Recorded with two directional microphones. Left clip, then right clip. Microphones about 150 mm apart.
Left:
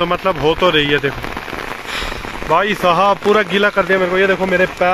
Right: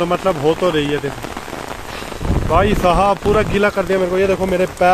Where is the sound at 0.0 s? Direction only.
5° right (ahead or behind).